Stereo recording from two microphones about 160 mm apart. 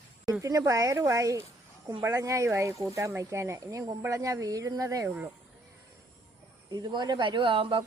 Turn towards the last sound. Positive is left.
turn(degrees=-35)  # may be behind; listen again after turning